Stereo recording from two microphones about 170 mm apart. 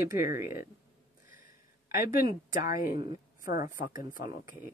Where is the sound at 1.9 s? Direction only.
55° left (ahead or behind).